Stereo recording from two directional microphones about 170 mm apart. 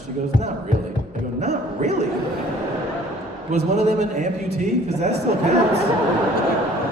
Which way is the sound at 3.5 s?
40° right (ahead or behind).